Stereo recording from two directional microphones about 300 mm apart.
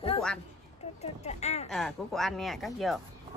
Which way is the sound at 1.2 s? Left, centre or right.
Left.